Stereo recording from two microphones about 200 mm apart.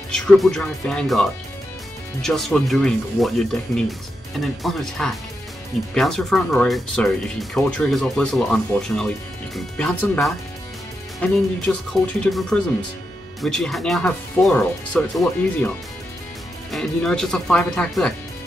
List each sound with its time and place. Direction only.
0.1 s speech: 5° left (ahead or behind)
2.2 s speech: centre (ahead or behind)
16.7 s speech: centre (ahead or behind)